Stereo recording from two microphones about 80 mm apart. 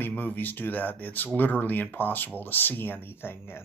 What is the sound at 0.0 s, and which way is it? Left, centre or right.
A man's voice, left.